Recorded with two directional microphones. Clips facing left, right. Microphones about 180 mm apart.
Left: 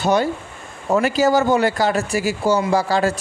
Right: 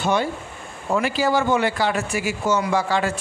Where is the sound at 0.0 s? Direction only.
40° left (ahead or behind).